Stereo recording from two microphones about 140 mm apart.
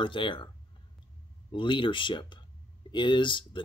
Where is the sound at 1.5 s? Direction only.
35° left (ahead or behind).